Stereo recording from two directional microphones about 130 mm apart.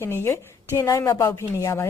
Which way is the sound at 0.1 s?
20° left (ahead or behind).